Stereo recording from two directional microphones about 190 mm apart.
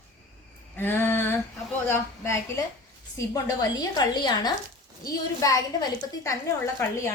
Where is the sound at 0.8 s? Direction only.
10° left (ahead or behind).